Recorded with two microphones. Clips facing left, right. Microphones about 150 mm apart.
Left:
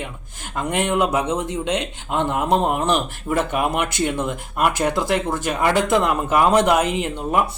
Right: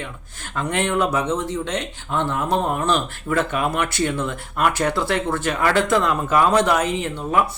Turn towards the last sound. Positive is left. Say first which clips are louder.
# even
turn(degrees=10)  # may be behind; listen again after turning